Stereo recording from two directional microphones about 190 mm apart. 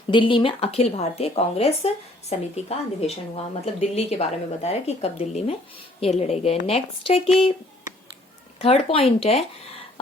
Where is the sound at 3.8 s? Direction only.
35° left (ahead or behind).